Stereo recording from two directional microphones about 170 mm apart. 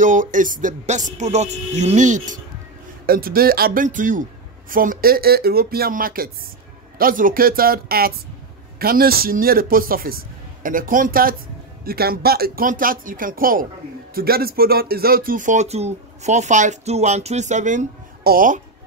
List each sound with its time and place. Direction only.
0.0 s speech: 50° right (ahead or behind)
3.1 s a man's voice: 60° right (ahead or behind)
18.2 s speech: 55° right (ahead or behind)